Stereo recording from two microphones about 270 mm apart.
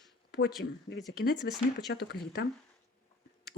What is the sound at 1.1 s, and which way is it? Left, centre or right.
Speech, left.